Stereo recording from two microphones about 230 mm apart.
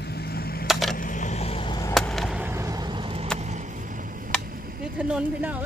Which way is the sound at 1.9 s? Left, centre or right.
Centre.